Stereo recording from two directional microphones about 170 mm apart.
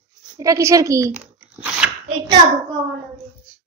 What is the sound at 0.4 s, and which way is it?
Speech, 15° right (ahead or behind).